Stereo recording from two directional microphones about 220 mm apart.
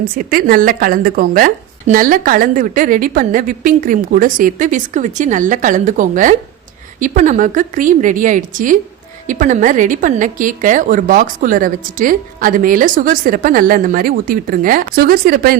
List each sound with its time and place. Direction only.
0.3 s a woman's voice: 40° right (ahead or behind)